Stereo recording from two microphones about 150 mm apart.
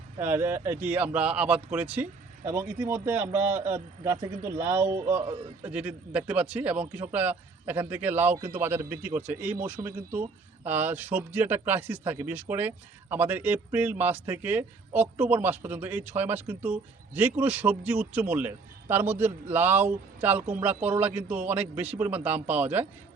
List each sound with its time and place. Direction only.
0.2 s a man's voice: 15° right (ahead or behind)